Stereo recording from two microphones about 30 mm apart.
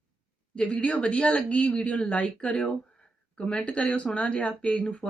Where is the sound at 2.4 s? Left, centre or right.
Left.